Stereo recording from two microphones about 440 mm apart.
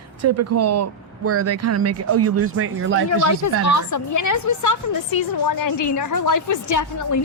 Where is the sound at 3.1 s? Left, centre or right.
Left.